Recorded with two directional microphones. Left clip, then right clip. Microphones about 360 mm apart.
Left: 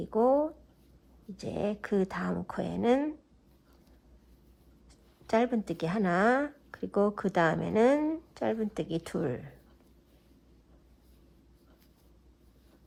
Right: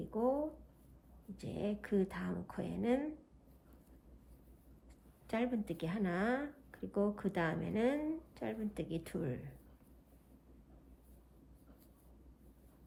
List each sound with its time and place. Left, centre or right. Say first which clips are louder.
0.1 s speech: left 10 dB; centre
1.4 s speech: left 8 dB; centre
5.2 s speech: left 10 dB; centre